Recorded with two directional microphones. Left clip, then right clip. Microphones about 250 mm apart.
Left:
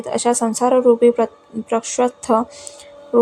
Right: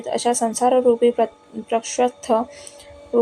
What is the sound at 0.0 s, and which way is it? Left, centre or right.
A woman's voice, centre.